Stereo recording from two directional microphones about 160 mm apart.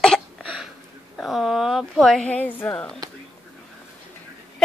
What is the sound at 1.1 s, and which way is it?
A woman's voice, centre (ahead or behind).